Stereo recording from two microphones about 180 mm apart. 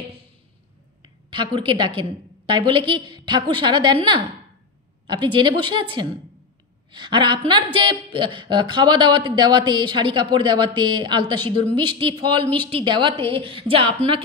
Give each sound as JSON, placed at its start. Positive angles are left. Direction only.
{"t": 1.0, "sound": "a woman's voice", "side_deg": -30}